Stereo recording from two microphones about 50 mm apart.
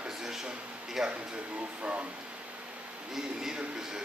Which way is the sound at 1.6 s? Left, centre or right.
Right.